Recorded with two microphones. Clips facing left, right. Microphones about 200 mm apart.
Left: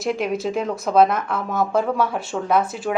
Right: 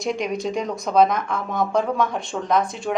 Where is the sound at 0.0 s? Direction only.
5° left (ahead or behind).